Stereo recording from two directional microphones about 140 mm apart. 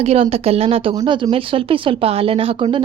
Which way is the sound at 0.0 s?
45° right (ahead or behind).